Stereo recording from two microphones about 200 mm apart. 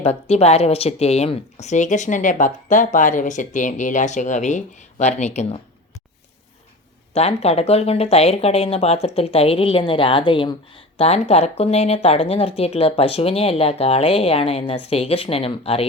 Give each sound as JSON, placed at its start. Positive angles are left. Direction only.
{"t": 0.0, "sound": "speech", "side_deg": 30}
{"t": 7.1, "sound": "speech", "side_deg": 30}